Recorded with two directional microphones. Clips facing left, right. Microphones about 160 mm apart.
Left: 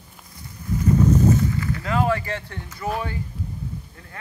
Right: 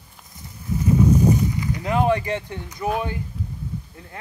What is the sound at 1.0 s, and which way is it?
Boat, 15° right (ahead or behind).